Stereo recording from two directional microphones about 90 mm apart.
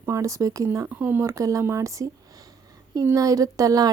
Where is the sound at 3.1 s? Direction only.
40° right (ahead or behind).